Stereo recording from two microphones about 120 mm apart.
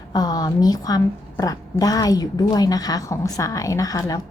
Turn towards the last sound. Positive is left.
turn(degrees=30)  # may be behind; listen again after turning